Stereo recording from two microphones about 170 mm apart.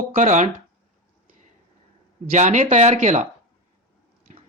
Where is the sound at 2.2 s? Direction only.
45° right (ahead or behind).